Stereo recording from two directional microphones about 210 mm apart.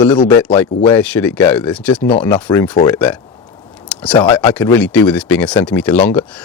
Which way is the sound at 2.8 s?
10° left (ahead or behind).